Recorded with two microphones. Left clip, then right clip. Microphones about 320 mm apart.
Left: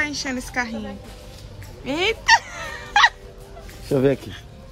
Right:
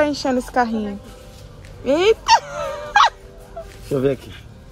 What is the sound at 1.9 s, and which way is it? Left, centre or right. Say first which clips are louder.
Fowl: right 3 dB; centre.